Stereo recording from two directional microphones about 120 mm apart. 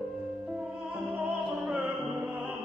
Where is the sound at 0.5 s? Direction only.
10° right (ahead or behind).